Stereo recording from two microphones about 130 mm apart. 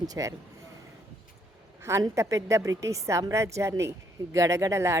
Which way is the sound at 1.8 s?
20° right (ahead or behind).